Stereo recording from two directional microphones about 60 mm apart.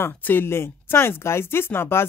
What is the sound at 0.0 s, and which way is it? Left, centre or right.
Speech, left.